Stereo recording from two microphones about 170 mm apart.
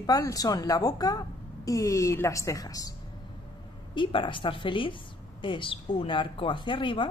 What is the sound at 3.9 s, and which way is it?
A woman's voice, 30° left (ahead or behind).